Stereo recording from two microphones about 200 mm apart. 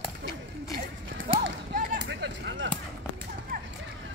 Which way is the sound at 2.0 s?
60° right (ahead or behind).